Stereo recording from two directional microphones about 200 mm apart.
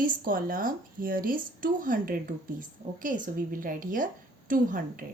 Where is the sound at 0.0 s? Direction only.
45° right (ahead or behind).